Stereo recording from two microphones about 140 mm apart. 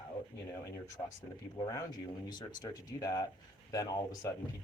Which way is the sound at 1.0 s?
35° left (ahead or behind).